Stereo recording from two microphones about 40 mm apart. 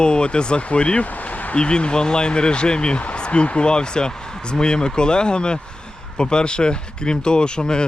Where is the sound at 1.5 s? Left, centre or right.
Left.